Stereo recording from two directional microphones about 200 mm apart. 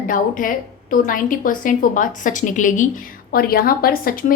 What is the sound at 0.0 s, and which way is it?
A woman's voice, 40° left (ahead or behind).